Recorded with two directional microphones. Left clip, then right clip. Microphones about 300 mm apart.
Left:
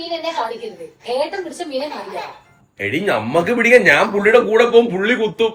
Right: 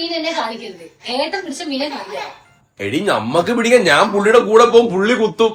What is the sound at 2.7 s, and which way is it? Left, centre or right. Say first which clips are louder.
A man's voice: right 1 dB; centre.